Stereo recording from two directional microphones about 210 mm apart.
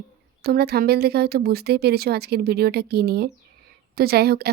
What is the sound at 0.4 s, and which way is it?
Speech, 50° right (ahead or behind).